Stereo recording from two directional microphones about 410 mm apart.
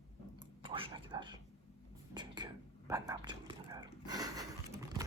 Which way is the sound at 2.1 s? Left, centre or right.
Centre.